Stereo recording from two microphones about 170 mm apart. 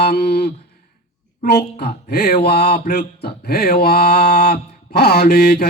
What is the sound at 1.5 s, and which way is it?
Mantra, 75° left (ahead or behind).